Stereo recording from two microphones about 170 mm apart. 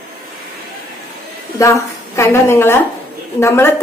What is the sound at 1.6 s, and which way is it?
A woman's voice, 15° left (ahead or behind).